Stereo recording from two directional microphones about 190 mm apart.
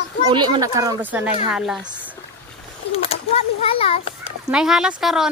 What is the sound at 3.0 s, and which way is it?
A child's voice, 30° left (ahead or behind).